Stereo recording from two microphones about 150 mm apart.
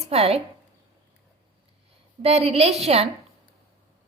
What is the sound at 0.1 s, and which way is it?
Speech, 45° right (ahead or behind).